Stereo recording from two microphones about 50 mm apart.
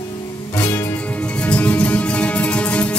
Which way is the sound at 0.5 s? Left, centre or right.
Left.